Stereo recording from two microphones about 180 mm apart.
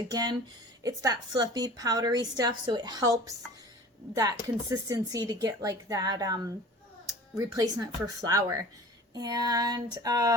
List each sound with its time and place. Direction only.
0.1 s a woman's voice: 20° right (ahead or behind)